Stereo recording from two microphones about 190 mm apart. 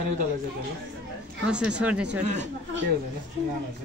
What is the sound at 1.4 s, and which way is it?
Speech, 5° right (ahead or behind).